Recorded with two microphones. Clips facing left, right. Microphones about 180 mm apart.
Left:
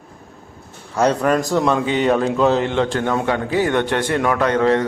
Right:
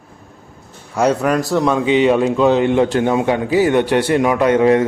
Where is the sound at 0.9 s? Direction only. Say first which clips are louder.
Right 1 dB; 10° right (ahead or behind).